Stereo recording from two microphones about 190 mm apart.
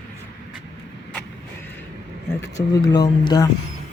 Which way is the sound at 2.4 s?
20° left (ahead or behind).